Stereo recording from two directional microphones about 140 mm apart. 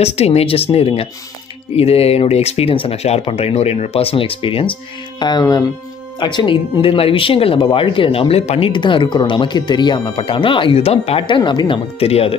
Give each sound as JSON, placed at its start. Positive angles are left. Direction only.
{"t": 0.0, "sound": "speech", "side_deg": 50}